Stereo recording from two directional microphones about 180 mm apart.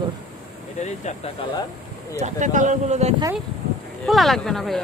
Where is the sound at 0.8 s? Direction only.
40° left (ahead or behind).